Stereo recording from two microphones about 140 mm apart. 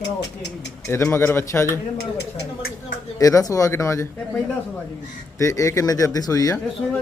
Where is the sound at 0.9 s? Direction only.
20° left (ahead or behind).